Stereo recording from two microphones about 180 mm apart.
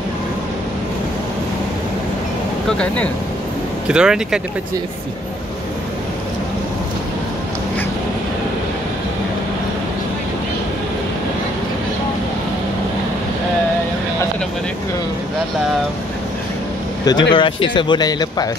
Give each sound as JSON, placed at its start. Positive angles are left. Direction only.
{"t": 3.9, "sound": "speech", "side_deg": -5}
{"t": 17.0, "sound": "speech", "side_deg": 25}